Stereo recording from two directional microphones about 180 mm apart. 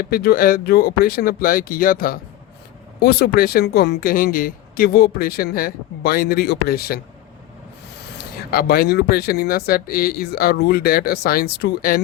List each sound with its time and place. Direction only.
0.0 s speech: 55° left (ahead or behind)
8.2 s speech: 60° left (ahead or behind)